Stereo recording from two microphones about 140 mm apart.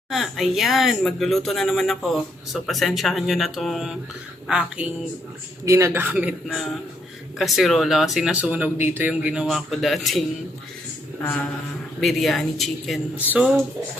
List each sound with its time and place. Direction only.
0.1 s speech: centre (ahead or behind)
5.6 s speech: 20° right (ahead or behind)
6.5 s speech: centre (ahead or behind)
11.2 s speech: 10° left (ahead or behind)